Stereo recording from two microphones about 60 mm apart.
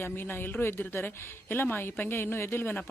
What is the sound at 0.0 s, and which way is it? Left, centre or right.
Speech, left.